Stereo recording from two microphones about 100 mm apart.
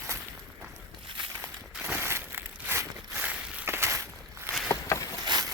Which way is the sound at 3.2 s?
15° right (ahead or behind).